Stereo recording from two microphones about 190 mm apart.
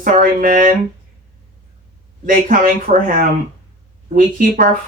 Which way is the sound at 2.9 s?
40° right (ahead or behind).